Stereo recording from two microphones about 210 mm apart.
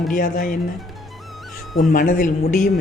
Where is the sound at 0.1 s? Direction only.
40° left (ahead or behind).